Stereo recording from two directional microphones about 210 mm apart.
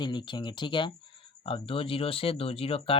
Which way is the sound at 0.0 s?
20° left (ahead or behind).